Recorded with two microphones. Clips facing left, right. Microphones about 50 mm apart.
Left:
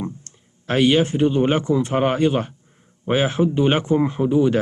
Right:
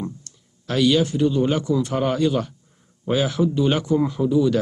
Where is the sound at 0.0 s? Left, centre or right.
Left.